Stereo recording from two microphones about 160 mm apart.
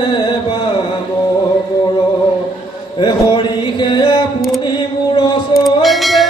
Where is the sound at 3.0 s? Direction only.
30° left (ahead or behind).